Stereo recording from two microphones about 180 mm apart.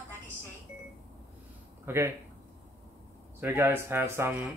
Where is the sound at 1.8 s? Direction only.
15° right (ahead or behind).